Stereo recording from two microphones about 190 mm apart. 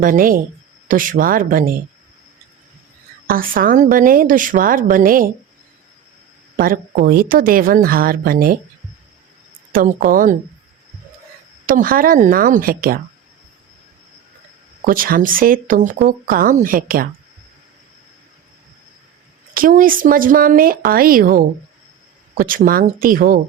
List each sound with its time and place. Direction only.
0.0 s speech: 45° right (ahead or behind)
3.2 s speech: 50° right (ahead or behind)
6.6 s speech: 50° right (ahead or behind)
9.7 s speech: 45° right (ahead or behind)
11.6 s speech: 45° right (ahead or behind)
14.8 s speech: 45° right (ahead or behind)
19.5 s speech: 45° right (ahead or behind)